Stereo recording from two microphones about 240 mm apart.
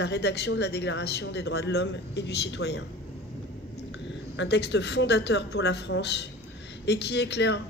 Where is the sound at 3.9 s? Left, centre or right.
Left.